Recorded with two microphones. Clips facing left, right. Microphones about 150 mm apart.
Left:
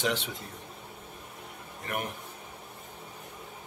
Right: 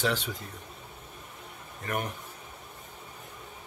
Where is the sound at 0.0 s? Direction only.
20° left (ahead or behind).